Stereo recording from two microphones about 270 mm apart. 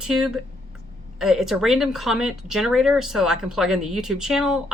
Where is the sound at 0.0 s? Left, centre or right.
Centre.